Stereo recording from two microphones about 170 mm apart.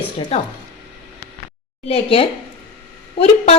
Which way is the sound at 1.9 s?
35° left (ahead or behind).